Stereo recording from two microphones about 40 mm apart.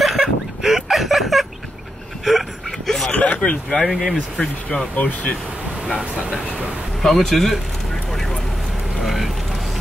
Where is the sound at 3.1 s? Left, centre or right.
Left.